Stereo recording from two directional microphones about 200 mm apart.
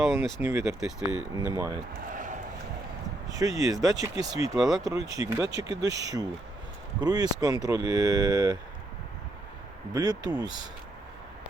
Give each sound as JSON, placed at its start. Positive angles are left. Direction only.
{"t": 0.0, "sound": "speech", "side_deg": -15}
{"t": 0.8, "sound": "speech", "side_deg": 0}
{"t": 1.4, "sound": "speech", "side_deg": -15}
{"t": 2.1, "sound": "a sound", "side_deg": -40}
{"t": 3.3, "sound": "speech", "side_deg": -15}
{"t": 9.9, "sound": "speech", "side_deg": -20}